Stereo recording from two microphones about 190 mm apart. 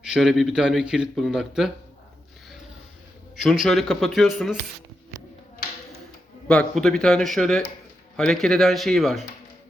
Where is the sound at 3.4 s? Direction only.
Centre (ahead or behind).